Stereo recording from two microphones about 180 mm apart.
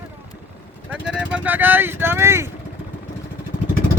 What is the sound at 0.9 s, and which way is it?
Vehicle, 5° right (ahead or behind).